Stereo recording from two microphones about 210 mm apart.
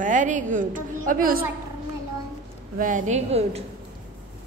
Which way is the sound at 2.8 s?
40° right (ahead or behind).